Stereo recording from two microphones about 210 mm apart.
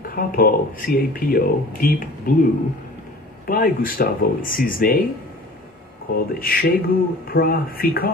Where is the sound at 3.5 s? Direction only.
40° left (ahead or behind).